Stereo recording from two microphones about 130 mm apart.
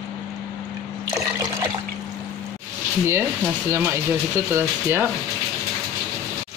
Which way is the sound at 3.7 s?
20° right (ahead or behind).